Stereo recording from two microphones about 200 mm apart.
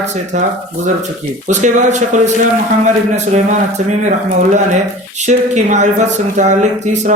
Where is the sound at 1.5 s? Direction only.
35° right (ahead or behind).